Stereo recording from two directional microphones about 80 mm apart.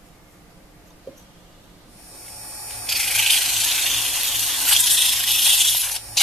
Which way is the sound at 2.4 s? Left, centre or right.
Centre.